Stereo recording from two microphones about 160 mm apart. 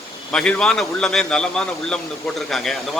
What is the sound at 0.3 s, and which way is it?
Speech, 5° left (ahead or behind).